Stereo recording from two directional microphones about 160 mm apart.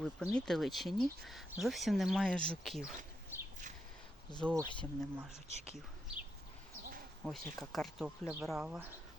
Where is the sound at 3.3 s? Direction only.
15° right (ahead or behind).